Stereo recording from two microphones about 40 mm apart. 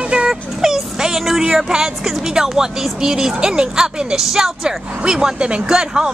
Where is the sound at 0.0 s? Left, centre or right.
Right.